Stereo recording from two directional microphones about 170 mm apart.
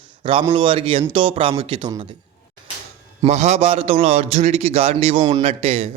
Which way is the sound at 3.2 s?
40° right (ahead or behind).